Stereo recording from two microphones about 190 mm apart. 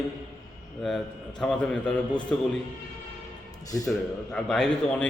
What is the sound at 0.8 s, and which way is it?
A man's voice, centre (ahead or behind).